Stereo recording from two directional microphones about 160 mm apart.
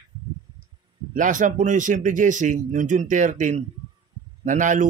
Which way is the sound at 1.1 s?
55° right (ahead or behind).